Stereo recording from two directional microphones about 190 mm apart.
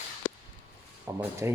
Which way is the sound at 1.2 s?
15° right (ahead or behind).